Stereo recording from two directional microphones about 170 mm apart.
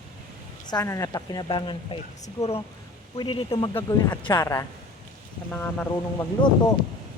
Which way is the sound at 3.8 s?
20° left (ahead or behind).